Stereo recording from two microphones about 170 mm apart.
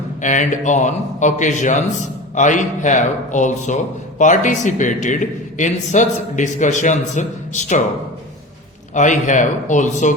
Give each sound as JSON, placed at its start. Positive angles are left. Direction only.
{"t": 0.2, "sound": "a man's voice", "side_deg": 45}
{"t": 9.0, "sound": "a man's voice", "side_deg": 45}